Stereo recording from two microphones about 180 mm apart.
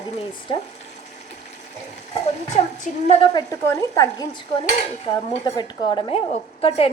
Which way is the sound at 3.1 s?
35° left (ahead or behind).